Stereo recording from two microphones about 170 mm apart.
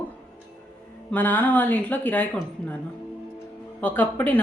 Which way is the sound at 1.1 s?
10° left (ahead or behind).